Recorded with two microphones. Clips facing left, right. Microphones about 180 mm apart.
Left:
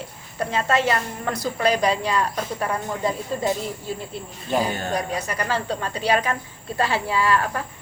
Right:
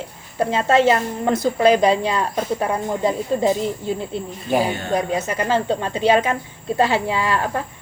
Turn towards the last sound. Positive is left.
turn(degrees=-25)  # may be behind; listen again after turning